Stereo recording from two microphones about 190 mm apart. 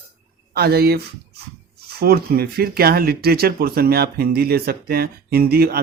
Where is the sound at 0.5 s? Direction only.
55° right (ahead or behind).